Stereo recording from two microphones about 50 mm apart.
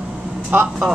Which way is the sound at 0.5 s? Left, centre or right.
Right.